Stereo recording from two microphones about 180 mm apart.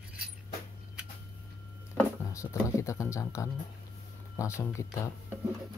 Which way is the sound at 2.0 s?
15° left (ahead or behind).